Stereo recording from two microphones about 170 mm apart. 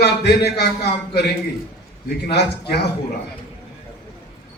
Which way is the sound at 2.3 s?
75° left (ahead or behind).